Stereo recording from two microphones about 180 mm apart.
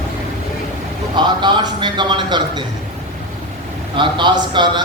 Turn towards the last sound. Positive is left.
turn(degrees=-25)  # may be behind; listen again after turning